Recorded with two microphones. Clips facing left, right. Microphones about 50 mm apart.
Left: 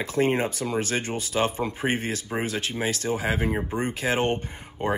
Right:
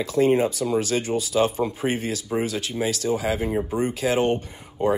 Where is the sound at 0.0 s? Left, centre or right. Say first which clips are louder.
Right 4 dB; left.